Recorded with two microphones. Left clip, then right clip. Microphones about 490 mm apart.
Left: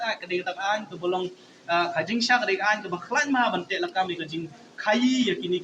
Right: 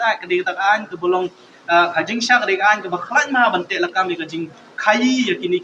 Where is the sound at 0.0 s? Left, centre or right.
Left.